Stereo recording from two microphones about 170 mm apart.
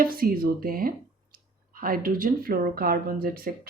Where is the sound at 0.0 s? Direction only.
60° right (ahead or behind).